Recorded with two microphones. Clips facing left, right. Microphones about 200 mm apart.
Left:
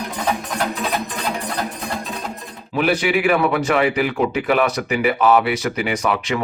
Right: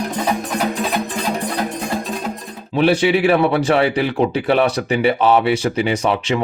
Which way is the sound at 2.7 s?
30° right (ahead or behind).